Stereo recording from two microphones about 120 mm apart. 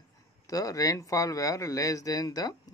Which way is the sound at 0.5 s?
30° left (ahead or behind).